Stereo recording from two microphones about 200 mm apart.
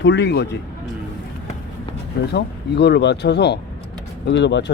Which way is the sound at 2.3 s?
55° left (ahead or behind).